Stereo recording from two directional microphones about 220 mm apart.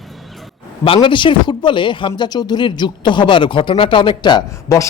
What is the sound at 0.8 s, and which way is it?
A man's voice, 25° left (ahead or behind).